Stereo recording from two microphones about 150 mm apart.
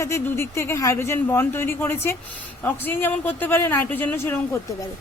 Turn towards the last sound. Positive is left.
turn(degrees=15)  # may be behind; listen again after turning